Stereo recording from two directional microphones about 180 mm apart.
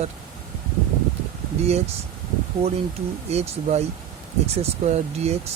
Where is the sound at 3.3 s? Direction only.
35° right (ahead or behind).